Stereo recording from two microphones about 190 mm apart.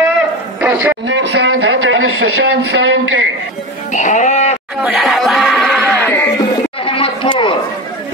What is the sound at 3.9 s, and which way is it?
Speech, 40° left (ahead or behind).